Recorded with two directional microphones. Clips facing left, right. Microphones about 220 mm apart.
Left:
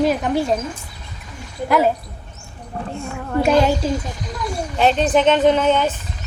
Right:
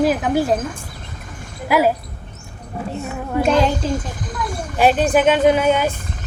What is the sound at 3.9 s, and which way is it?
Speech, 50° right (ahead or behind).